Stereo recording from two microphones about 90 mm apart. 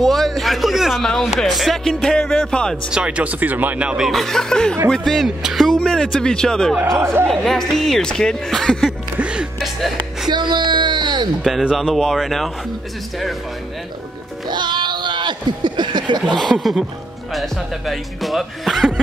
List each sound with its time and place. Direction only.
0.0 s speech: centre (ahead or behind)
2.9 s speech: 10° right (ahead or behind); by 8.9 s 5° left (ahead or behind)
9.2 s music: 10° right (ahead or behind)
9.6 s music: centre (ahead or behind)
10.3 s music: 55° right (ahead or behind)
11.7 s speech: centre (ahead or behind)
14.5 s a sound: 60° right (ahead or behind)
16.3 s speech: centre (ahead or behind)